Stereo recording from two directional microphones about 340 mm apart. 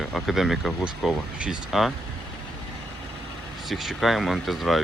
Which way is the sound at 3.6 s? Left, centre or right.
Centre.